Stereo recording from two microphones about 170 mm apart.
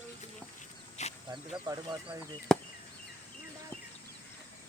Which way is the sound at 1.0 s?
40° left (ahead or behind).